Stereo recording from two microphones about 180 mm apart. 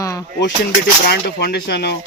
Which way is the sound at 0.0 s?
20° left (ahead or behind).